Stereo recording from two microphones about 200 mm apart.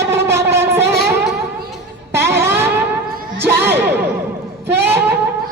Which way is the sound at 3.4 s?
55° right (ahead or behind).